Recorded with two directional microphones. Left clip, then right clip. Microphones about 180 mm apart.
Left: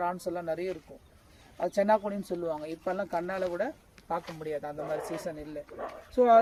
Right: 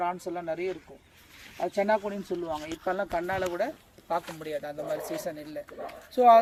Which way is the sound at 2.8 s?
5° left (ahead or behind).